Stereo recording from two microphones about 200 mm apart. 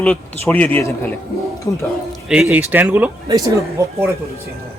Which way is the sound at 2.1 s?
Centre (ahead or behind).